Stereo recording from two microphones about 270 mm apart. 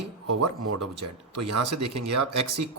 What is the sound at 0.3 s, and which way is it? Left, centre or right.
Speech, right.